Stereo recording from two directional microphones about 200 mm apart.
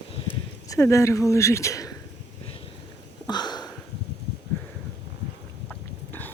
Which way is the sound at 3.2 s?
20° left (ahead or behind).